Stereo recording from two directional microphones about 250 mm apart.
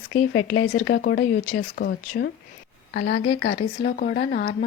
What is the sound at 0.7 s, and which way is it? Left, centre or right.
Speech, left.